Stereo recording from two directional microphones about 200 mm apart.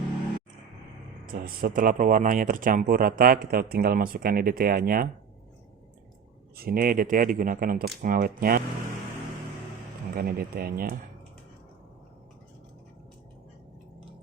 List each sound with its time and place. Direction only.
1.3 s speech: 45° right (ahead or behind)
6.6 s speech: 50° right (ahead or behind)
10.2 s speech: 50° right (ahead or behind)